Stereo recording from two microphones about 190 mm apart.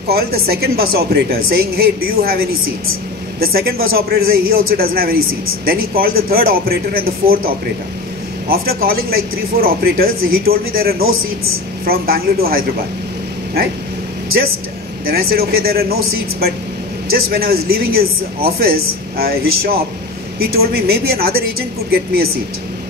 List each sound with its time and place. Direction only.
0.1 s a man's voice: 55° right (ahead or behind)
13.6 s dog: 55° right (ahead or behind)
15.0 s a man's voice: 55° right (ahead or behind)